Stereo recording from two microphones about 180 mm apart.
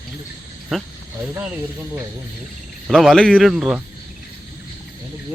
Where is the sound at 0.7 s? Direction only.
5° right (ahead or behind).